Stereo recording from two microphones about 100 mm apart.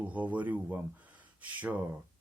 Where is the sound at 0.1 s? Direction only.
15° right (ahead or behind).